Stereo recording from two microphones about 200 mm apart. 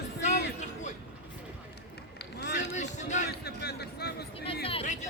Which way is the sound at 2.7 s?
35° left (ahead or behind).